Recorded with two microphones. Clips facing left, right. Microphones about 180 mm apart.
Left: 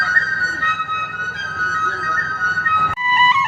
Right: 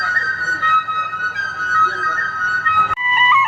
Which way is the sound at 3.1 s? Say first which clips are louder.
Even; 80° left.